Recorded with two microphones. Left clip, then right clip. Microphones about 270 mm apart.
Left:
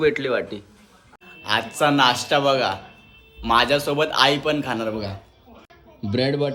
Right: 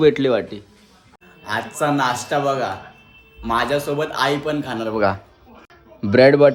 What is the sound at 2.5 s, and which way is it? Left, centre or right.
A man's voice, centre.